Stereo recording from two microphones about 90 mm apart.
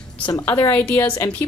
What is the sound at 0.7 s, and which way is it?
Speech, 20° left (ahead or behind).